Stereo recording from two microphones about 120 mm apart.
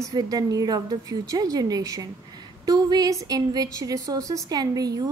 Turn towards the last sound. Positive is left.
turn(degrees=-30)  # may be behind; listen again after turning